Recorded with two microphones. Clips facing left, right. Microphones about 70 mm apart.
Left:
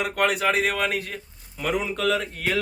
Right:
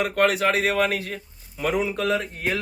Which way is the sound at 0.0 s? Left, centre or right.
Centre.